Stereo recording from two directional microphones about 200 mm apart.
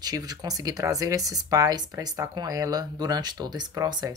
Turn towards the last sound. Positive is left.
turn(degrees=-20)  # may be behind; listen again after turning